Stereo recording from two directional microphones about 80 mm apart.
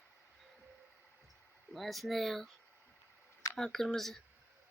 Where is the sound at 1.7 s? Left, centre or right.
Centre.